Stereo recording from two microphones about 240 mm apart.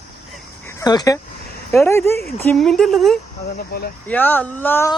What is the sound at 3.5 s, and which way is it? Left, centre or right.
Speech, left.